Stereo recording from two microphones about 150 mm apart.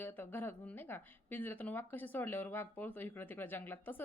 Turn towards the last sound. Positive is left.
turn(degrees=15)  # may be behind; listen again after turning